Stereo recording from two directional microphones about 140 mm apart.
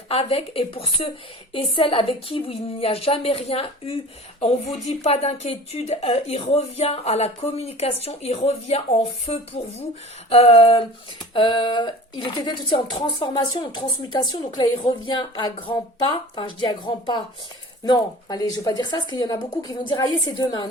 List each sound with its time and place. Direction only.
0.1 s speech: 45° left (ahead or behind)